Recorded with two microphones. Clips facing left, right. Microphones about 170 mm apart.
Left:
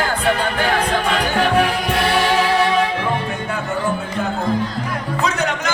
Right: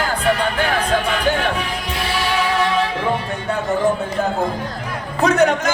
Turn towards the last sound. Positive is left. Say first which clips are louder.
# right 6 dB
turn(degrees=-55)  # may be behind; listen again after turning